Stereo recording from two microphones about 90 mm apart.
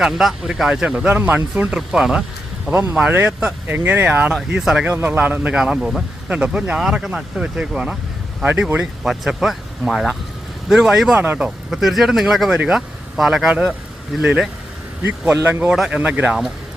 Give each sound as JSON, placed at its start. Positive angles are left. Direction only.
{"t": 0.0, "sound": "speech", "side_deg": -5}
{"t": 1.6, "sound": "speech", "side_deg": -5}
{"t": 4.5, "sound": "speech", "side_deg": -5}
{"t": 4.9, "sound": "speech", "side_deg": -25}
{"t": 11.2, "sound": "speech", "side_deg": -15}
{"t": 11.7, "sound": "speech", "side_deg": 0}